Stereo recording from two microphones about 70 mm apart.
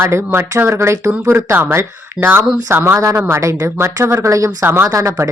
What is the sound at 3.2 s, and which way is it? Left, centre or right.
Speech, right.